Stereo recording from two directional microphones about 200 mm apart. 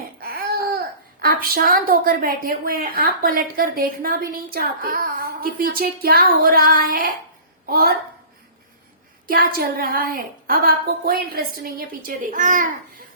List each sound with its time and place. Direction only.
0.2 s a woman's voice: 45° right (ahead or behind)
9.3 s a woman's voice: 45° right (ahead or behind)